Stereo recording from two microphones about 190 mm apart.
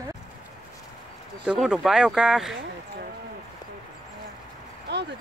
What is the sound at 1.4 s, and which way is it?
Speech, 5° right (ahead or behind).